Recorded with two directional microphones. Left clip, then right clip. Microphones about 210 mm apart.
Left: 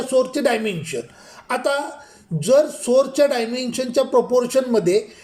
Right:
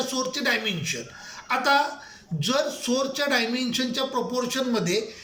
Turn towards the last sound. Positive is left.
turn(degrees=35)  # may be behind; listen again after turning